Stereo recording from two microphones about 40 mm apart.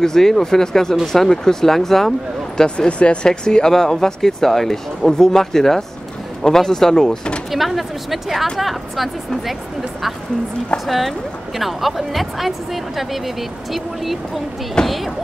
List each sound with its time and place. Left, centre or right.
0.0 s speech: centre
2.9 s speech: left
3.3 s speech: centre
7.5 s a woman's voice: centre
10.9 s a woman's voice: centre